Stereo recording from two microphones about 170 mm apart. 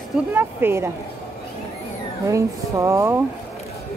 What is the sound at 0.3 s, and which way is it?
Speech, 10° right (ahead or behind).